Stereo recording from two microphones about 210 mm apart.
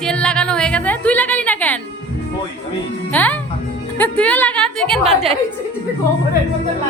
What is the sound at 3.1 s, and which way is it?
A woman's voice, 5° left (ahead or behind).